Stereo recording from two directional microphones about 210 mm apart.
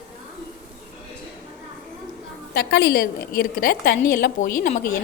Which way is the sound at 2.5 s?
55° left (ahead or behind).